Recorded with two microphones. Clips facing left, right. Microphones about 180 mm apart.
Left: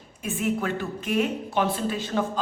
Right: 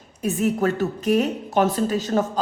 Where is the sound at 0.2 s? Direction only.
40° right (ahead or behind).